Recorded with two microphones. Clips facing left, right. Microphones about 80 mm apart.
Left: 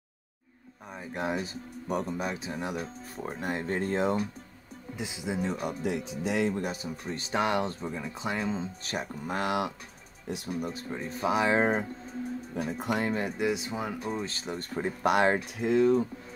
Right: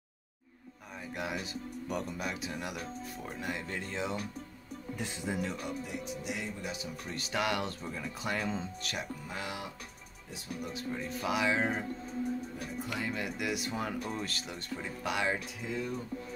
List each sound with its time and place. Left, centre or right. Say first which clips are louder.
1.1 s speech: left 6 dB; left
3.3 s speech: left 8 dB; left
4.9 s speech: left 3 dB; centre
5.4 s speech: left 5 dB; left
5.8 s speech: left 7 dB; left
6.6 s speech: left 6 dB; left
7.1 s speech: left 5 dB; left
9.3 s speech: left 14 dB; left
10.6 s speech: left 3 dB; left
12.6 s speech: left 11 dB; left
13.0 s speech: left 5 dB; left
14.4 s speech: left 7 dB; left
15.0 s speech: left 9 dB; left
15.6 s speech: left 18 dB; left